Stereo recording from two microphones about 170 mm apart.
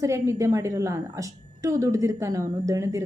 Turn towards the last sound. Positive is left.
turn(degrees=-20)  # may be behind; listen again after turning